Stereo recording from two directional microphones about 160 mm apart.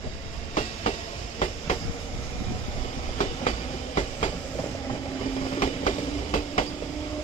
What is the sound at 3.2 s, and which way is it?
Train, 45° left (ahead or behind).